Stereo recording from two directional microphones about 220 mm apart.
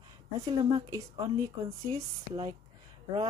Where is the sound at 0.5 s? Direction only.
20° right (ahead or behind).